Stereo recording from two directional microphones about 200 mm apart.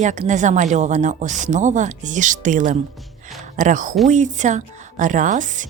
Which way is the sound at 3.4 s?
40° right (ahead or behind).